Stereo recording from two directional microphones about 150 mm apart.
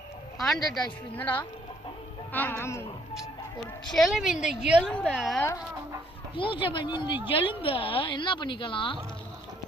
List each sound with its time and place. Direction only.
0.3 s a woman's voice: centre (ahead or behind)
3.9 s a woman's voice: centre (ahead or behind)
4.9 s a woman's voice: 5° left (ahead or behind)
5.4 s speech: 20° left (ahead or behind)
6.3 s a woman's voice: 35° left (ahead or behind)